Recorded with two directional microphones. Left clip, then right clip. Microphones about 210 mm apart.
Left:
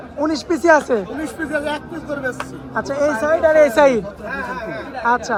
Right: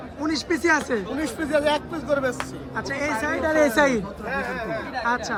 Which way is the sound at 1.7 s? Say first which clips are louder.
Right 2 dB; 30° right (ahead or behind).